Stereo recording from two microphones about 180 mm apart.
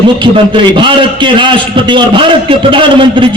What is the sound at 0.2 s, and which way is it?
A man's voice, 25° right (ahead or behind).